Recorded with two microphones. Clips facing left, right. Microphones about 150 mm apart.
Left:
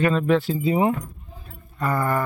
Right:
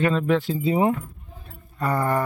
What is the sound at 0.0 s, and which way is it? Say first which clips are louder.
Speech: left 1 dB; 20° right (ahead or behind).